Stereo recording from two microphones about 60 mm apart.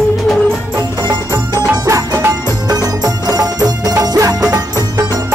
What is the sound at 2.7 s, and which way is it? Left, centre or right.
Music, right.